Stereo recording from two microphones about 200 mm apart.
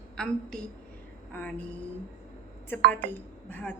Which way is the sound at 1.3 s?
5° left (ahead or behind).